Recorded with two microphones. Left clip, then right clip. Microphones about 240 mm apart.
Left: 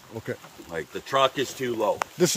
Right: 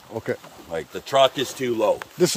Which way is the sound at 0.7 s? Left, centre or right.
Right.